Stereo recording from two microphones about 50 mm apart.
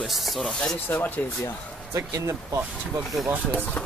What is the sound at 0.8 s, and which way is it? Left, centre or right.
Speech, left.